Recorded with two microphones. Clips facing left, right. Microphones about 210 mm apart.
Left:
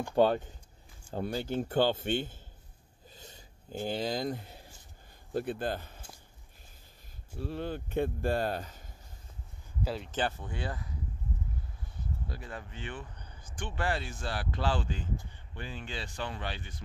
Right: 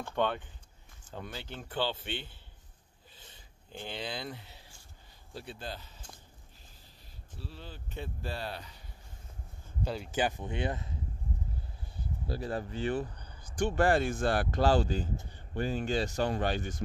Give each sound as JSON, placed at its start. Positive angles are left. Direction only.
{"t": 0.1, "sound": "speech", "side_deg": 35}
{"t": 3.2, "sound": "a sound", "side_deg": 40}
{"t": 5.3, "sound": "a man's voice", "side_deg": 55}
{"t": 7.3, "sound": "speech", "side_deg": 55}
{"t": 9.8, "sound": "speech", "side_deg": 0}
{"t": 10.1, "sound": "speech", "side_deg": -15}
{"t": 12.3, "sound": "speech", "side_deg": -35}